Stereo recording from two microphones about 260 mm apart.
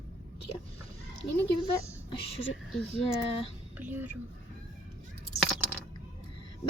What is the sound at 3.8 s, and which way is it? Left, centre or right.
Speech, centre.